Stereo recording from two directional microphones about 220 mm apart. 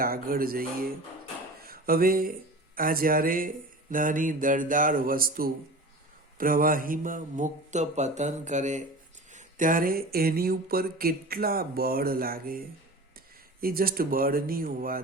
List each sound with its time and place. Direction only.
0.0 s speech: 40° right (ahead or behind)
9.3 s a sound: 35° right (ahead or behind)
13.6 s speech: 40° right (ahead or behind)